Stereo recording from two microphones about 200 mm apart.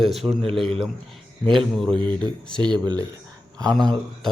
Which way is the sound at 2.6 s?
20° right (ahead or behind).